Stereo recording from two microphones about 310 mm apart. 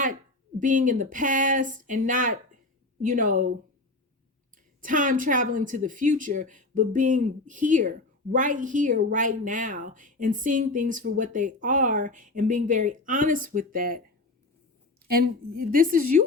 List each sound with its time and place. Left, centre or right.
0.6 s a woman's voice: right
4.8 s a woman's voice: right
15.0 s a woman's voice: right